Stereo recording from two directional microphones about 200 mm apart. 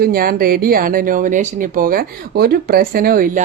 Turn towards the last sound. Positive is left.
turn(degrees=-45)  # may be behind; listen again after turning